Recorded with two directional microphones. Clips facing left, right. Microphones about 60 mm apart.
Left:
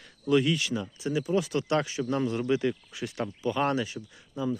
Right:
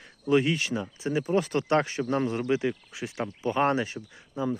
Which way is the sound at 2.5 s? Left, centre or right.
Right.